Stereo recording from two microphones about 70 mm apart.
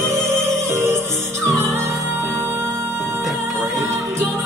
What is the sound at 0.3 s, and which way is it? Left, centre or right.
Music, right.